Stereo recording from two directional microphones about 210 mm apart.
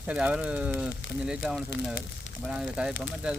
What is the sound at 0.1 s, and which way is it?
Speech, 5° right (ahead or behind).